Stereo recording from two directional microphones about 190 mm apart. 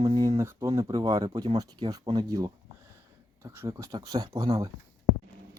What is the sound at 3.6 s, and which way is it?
Speech, 15° right (ahead or behind).